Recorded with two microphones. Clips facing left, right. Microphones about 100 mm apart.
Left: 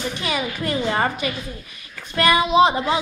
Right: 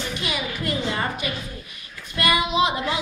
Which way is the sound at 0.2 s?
40° left (ahead or behind).